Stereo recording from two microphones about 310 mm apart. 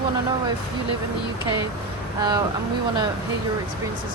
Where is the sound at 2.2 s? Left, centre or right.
Centre.